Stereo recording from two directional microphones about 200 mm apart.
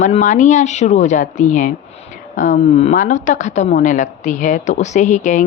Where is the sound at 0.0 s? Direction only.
35° left (ahead or behind).